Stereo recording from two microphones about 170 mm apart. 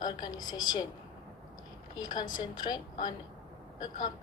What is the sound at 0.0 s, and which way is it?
Speech, 25° left (ahead or behind).